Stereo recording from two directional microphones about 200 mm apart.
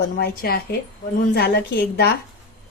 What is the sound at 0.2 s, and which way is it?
A woman's voice, 50° left (ahead or behind).